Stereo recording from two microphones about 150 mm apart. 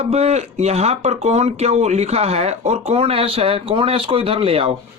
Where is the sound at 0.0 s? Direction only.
45° right (ahead or behind).